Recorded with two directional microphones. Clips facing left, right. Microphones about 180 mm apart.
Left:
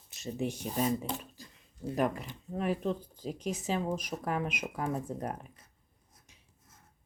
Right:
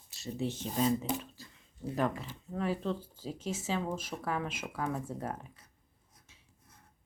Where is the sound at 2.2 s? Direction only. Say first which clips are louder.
Left 1 dB; 15° left (ahead or behind).